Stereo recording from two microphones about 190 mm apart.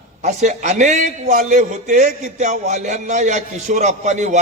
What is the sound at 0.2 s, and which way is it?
A man's voice, 40° right (ahead or behind).